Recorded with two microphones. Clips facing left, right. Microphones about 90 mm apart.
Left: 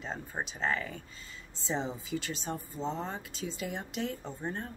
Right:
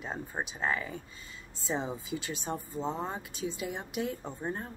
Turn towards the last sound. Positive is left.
turn(degrees=-10)  # may be behind; listen again after turning